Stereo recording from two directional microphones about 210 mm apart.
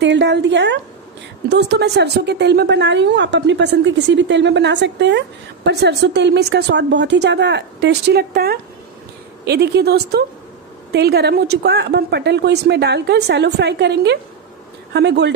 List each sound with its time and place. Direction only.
0.0 s a woman's voice: 55° right (ahead or behind)